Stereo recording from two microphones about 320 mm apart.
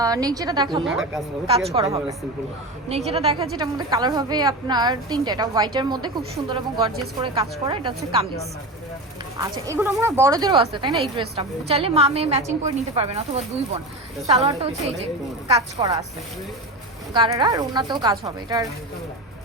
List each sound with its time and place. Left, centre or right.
0.0 s a woman's voice: centre
0.9 s a woman's voice: centre
1.5 s a woman's voice: centre
7.2 s a woman's voice: centre
9.4 s a woman's voice: centre
17.2 s a woman's voice: centre